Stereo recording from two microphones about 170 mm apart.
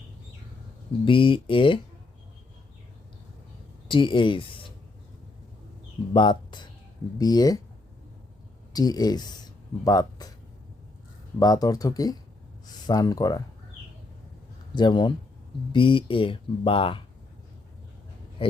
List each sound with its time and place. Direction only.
1.0 s speech: 30° left (ahead or behind)
3.8 s speech: 30° left (ahead or behind)
6.1 s speech: 25° left (ahead or behind)
8.7 s speech: 25° left (ahead or behind)
11.3 s speech: 20° left (ahead or behind)
14.8 s speech: 25° left (ahead or behind)